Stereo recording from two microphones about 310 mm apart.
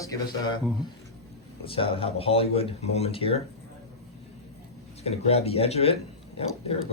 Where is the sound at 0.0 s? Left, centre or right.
Centre.